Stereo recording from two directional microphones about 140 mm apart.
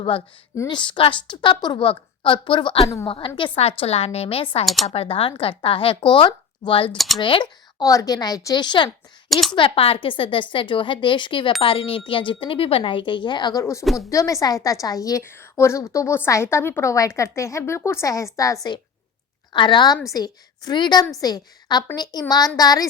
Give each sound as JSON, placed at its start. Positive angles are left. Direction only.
{"t": 0.7, "sound": "a woman's voice", "side_deg": 35}
{"t": 4.6, "sound": "speech", "side_deg": 0}
{"t": 4.9, "sound": "a woman's voice", "side_deg": 45}
{"t": 9.3, "sound": "speech", "side_deg": 0}
{"t": 9.6, "sound": "speech", "side_deg": 40}
{"t": 13.8, "sound": "speech", "side_deg": 0}
{"t": 14.1, "sound": "a woman's voice", "side_deg": 25}